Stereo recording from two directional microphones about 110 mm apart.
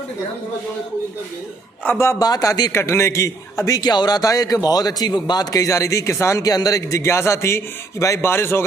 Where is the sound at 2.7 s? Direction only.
25° left (ahead or behind).